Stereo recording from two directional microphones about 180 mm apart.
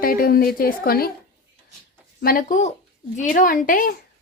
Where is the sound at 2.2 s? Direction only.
55° left (ahead or behind).